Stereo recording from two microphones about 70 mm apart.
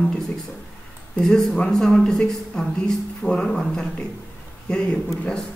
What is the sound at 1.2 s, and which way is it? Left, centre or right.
Speech, centre.